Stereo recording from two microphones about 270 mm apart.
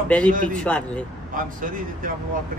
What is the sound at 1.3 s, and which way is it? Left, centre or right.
Speech, right.